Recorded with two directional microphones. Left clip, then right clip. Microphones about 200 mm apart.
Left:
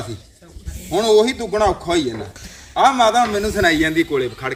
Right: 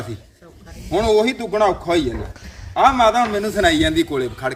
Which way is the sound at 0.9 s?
Centre (ahead or behind).